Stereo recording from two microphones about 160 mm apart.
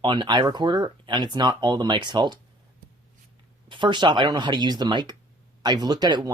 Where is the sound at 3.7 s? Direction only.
30° right (ahead or behind).